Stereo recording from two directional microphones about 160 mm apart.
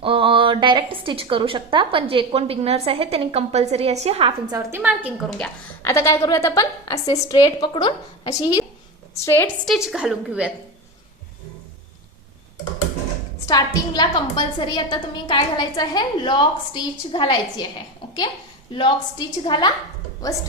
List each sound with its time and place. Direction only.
0.0 s a woman's voice: 35° right (ahead or behind)
4.4 s a woman's voice: 20° right (ahead or behind)
4.8 s a woman's voice: 10° right (ahead or behind)
5.8 s a woman's voice: 15° left (ahead or behind)
9.6 s a woman's voice: centre (ahead or behind)
13.4 s a woman's voice: 25° left (ahead or behind)
18.0 s a sound: 30° left (ahead or behind)
18.7 s a woman's voice: 30° left (ahead or behind)